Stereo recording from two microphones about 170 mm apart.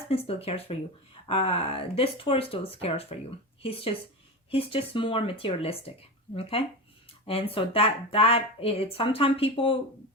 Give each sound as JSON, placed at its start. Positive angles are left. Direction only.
{"t": 0.1, "sound": "speech", "side_deg": 35}